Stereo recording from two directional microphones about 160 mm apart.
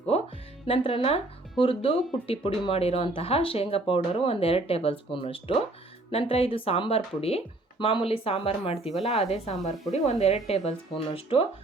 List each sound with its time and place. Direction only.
0.1 s music: 40° left (ahead or behind)
0.7 s speech: 35° left (ahead or behind)